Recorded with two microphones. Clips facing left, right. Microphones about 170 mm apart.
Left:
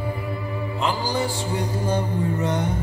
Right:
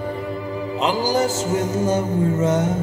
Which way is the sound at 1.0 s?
40° right (ahead or behind).